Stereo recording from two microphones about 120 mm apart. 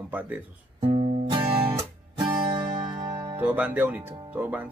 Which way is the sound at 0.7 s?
50° right (ahead or behind).